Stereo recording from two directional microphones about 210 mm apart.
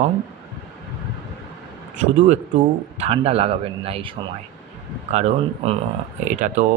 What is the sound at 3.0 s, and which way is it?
A man's voice, 30° right (ahead or behind).